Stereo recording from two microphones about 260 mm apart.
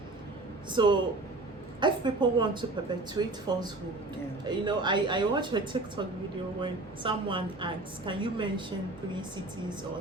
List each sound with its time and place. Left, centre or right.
0.7 s a woman's voice: centre